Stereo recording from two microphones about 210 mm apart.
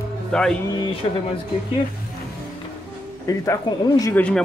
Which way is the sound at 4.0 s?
10° left (ahead or behind).